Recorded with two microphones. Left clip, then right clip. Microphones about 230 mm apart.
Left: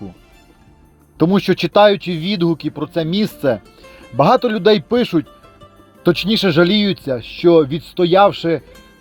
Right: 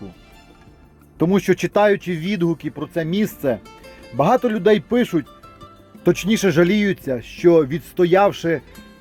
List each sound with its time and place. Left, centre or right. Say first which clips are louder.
1.2 s speech: left 2 dB; centre
2.5 s speech: left 4 dB; left
6.4 s speech: left 3 dB; centre
7.8 s speech: left 3 dB; centre